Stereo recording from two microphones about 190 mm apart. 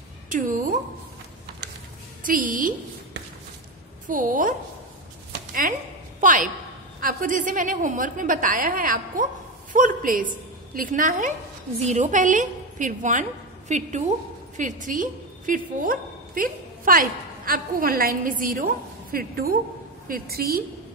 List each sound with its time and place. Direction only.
0.3 s a sound: 45° right (ahead or behind)
2.2 s a woman's voice: 45° right (ahead or behind)
4.1 s a woman's voice: 45° right (ahead or behind)